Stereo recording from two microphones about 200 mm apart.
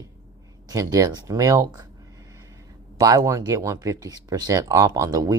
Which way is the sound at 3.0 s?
15° right (ahead or behind).